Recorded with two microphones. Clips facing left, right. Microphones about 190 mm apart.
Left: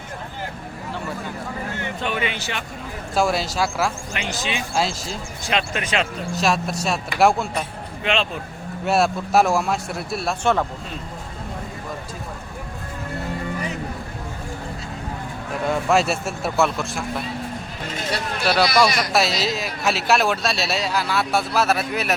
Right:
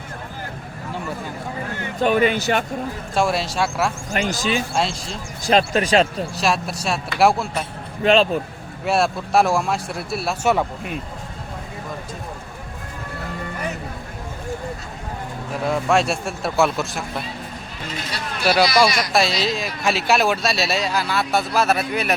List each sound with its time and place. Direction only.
2.0 s speech: 45° right (ahead or behind)
3.2 s a man's voice: centre (ahead or behind)
4.1 s speech: 40° right (ahead or behind)
4.7 s a man's voice: centre (ahead or behind)
5.5 s speech: 35° right (ahead or behind)
6.3 s a man's voice: centre (ahead or behind)
8.0 s speech: 40° right (ahead or behind)
8.8 s a man's voice: centre (ahead or behind)
15.6 s a man's voice: centre (ahead or behind)
18.4 s a man's voice: centre (ahead or behind)